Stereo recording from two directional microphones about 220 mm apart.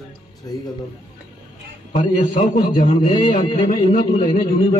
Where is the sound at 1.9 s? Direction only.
35° left (ahead or behind).